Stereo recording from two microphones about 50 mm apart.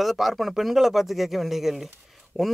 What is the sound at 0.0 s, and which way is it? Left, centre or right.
Speech, centre.